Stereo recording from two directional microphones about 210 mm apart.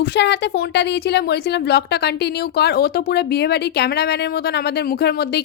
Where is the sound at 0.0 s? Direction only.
55° left (ahead or behind).